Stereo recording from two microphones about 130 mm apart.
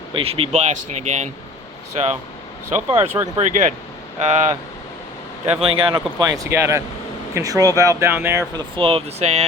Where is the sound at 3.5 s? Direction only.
85° right.